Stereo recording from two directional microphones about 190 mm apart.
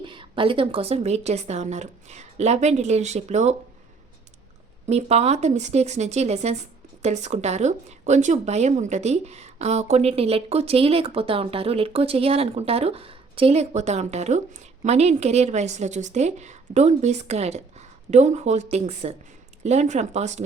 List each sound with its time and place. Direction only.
0.0 s speech: 25° right (ahead or behind)
4.9 s speech: 35° right (ahead or behind)